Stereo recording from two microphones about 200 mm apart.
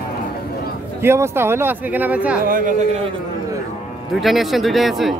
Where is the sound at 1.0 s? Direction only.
10° right (ahead or behind).